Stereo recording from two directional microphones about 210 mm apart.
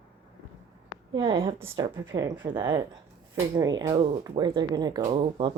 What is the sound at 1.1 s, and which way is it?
Speech, 20° right (ahead or behind).